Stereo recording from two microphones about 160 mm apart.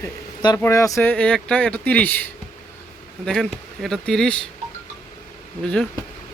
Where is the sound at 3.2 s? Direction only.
Centre (ahead or behind).